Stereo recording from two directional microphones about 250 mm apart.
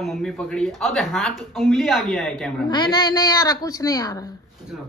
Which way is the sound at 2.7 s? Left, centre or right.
Centre.